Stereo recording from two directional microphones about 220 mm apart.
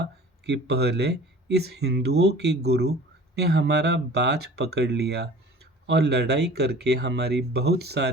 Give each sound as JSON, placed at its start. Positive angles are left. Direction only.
{"t": 0.4, "sound": "speech", "side_deg": -50}